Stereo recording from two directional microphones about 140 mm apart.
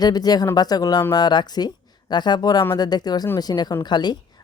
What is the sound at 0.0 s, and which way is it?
Speech, 30° left (ahead or behind).